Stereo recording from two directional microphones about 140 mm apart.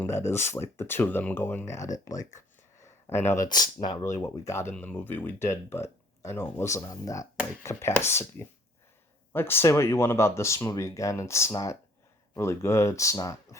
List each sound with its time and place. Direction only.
0.0 s speech: 20° left (ahead or behind)